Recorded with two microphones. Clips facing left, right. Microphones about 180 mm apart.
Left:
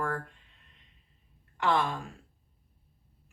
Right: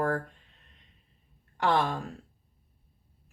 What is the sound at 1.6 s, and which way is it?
Speech, 45° right (ahead or behind).